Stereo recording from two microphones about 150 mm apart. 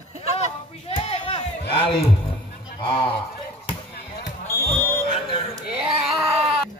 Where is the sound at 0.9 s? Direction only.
40° left (ahead or behind).